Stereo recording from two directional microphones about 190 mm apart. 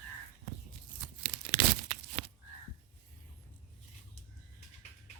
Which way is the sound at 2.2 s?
30° right (ahead or behind).